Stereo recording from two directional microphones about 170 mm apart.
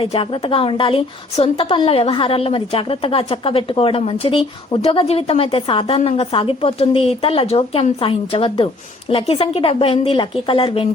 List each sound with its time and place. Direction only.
0.0 s a woman's voice: 35° left (ahead or behind)